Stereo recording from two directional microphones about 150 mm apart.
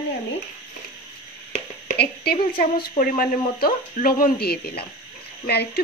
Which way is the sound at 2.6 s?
65° left (ahead or behind).